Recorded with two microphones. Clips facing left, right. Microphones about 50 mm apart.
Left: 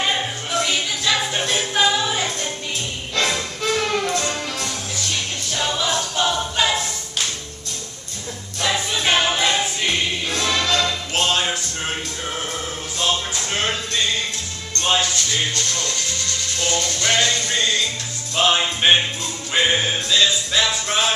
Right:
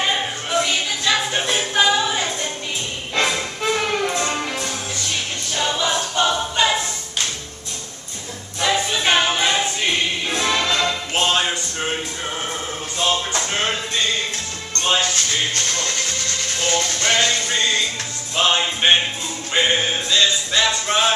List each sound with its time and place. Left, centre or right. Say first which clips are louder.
0.0 s music: right 1 dB; centre
3.2 s music: right 1 dB; centre
5.5 s a capella: right 1 dB; centre
8.5 s choir: right 2 dB; centre
10.4 s music: even; centre
13.5 s music: left 1 dB; centre
15.5 s music: right 1 dB; right
18.3 s music: even; centre